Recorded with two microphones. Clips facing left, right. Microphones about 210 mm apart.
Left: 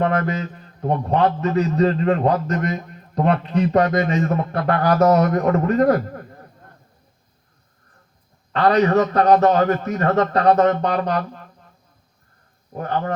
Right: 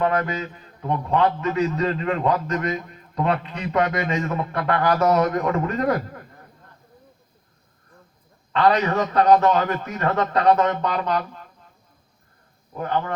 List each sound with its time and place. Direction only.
0.0 s a man's voice: 45° left (ahead or behind)
8.5 s a man's voice: 35° left (ahead or behind)
12.7 s a man's voice: 40° left (ahead or behind)